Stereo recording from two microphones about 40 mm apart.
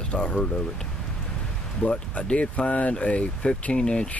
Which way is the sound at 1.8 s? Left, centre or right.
Left.